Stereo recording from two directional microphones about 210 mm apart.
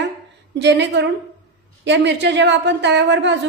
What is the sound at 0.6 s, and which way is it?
A woman's voice, 55° right (ahead or behind).